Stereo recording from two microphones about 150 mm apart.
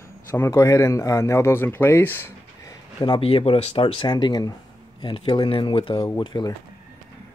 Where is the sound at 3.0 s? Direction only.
35° left (ahead or behind).